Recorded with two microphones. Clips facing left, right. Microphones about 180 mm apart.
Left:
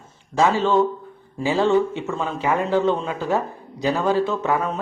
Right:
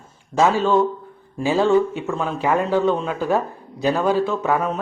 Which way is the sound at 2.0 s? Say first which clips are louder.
Right 2 dB; centre (ahead or behind).